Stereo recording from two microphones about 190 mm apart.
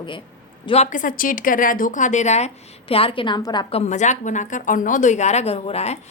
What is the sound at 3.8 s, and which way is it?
Speech, 40° left (ahead or behind).